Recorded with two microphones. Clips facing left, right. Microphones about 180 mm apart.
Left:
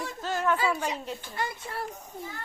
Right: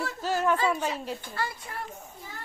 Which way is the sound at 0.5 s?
10° left (ahead or behind).